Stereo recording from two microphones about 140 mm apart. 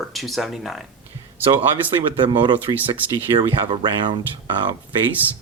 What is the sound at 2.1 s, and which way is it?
Speech, 35° right (ahead or behind).